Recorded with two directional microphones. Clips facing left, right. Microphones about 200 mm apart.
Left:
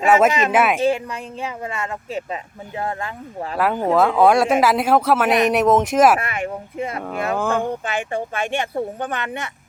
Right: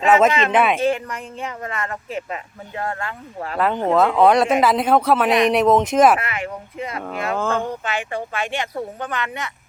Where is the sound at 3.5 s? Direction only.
5° left (ahead or behind).